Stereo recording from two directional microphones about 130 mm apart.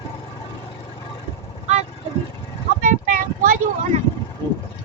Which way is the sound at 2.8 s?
90° right.